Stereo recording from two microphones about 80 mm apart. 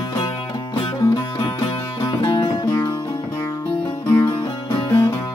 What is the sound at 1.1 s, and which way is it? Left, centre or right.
Music, left.